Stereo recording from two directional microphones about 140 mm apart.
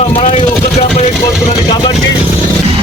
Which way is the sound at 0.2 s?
45° left (ahead or behind).